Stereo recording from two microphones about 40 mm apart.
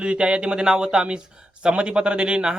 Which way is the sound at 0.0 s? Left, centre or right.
Right.